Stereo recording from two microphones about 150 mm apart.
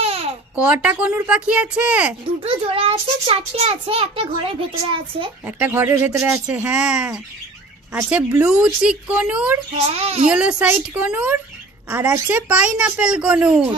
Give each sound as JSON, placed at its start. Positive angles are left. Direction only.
{"t": 0.0, "sound": "babbling", "side_deg": -40}
{"t": 0.6, "sound": "speech", "side_deg": -10}
{"t": 2.4, "sound": "a child's voice", "side_deg": -40}
{"t": 5.4, "sound": "speech", "side_deg": -15}
{"t": 8.5, "sound": "speech", "side_deg": -5}
{"t": 9.8, "sound": "a child's voice", "side_deg": -40}
{"t": 10.2, "sound": "speech", "side_deg": -5}